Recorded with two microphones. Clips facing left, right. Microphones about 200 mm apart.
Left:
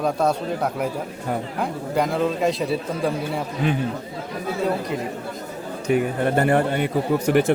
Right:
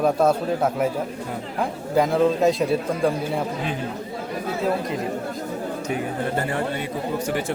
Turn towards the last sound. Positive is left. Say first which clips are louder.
# left 6 dB
turn(degrees=65)  # may be behind; listen again after turning